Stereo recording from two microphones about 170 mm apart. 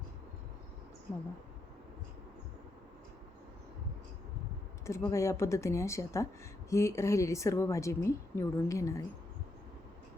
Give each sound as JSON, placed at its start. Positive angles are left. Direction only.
{"t": 4.9, "sound": "a woman's voice", "side_deg": 15}